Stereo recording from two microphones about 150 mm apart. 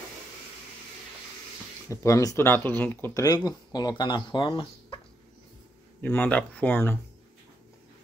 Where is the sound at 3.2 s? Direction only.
25° left (ahead or behind).